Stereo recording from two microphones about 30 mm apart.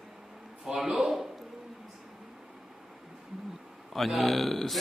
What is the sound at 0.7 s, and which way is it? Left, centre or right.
Speech, right.